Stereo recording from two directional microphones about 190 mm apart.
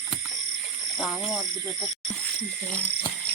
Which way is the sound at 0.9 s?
Centre (ahead or behind).